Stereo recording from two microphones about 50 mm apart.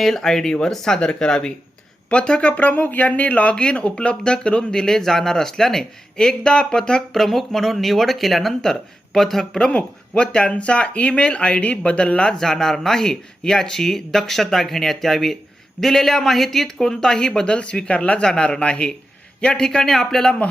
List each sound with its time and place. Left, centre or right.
0.0 s speech: centre; by 3.5 s left
3.5 s speech: centre
12.4 s a man's voice: centre